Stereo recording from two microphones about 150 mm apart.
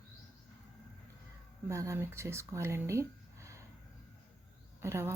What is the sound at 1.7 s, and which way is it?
Speech, 20° right (ahead or behind).